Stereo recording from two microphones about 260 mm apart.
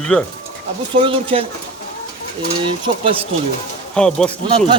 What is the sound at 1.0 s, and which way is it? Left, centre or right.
Speech, centre.